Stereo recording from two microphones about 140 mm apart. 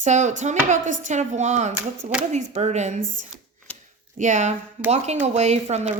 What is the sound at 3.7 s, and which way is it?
Chopping, 10° left (ahead or behind).